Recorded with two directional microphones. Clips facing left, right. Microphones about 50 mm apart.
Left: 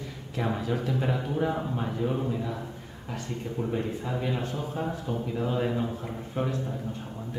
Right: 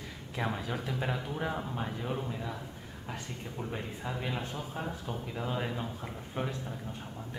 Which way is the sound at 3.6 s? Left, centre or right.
Right.